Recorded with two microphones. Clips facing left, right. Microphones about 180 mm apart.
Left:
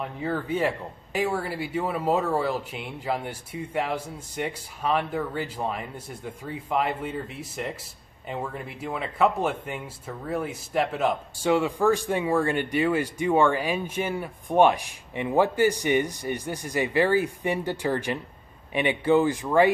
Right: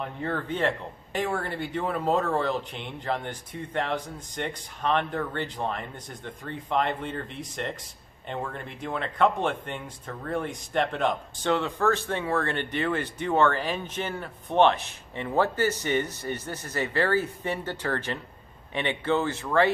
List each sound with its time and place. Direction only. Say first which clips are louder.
0.0 s speech: left 2 dB; 5° left (ahead or behind)